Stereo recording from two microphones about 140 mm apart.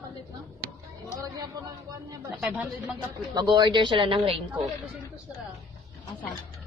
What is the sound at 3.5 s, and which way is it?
Speech, 35° right (ahead or behind).